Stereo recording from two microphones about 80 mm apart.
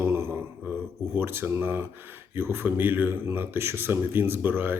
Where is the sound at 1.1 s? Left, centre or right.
Right.